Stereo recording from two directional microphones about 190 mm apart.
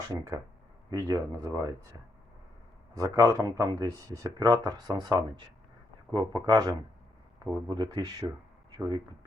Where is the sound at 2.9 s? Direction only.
15° right (ahead or behind).